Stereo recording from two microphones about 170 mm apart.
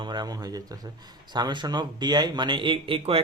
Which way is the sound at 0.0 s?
25° right (ahead or behind).